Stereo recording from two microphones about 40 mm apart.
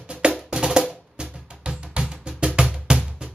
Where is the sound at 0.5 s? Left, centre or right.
Right.